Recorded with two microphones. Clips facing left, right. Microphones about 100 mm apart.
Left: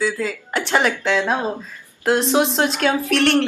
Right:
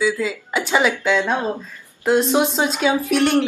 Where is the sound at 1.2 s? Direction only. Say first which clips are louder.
Even; 15° left (ahead or behind).